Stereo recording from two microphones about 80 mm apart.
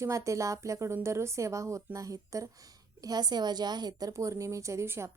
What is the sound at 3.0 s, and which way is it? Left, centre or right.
A woman's voice, right.